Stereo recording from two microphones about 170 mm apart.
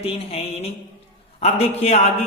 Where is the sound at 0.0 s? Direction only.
35° left (ahead or behind).